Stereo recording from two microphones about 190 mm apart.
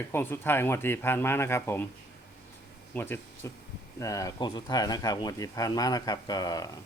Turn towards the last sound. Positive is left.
turn(degrees=20)  # may be behind; listen again after turning